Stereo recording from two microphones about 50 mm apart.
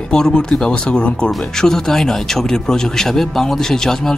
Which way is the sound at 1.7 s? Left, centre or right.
Centre.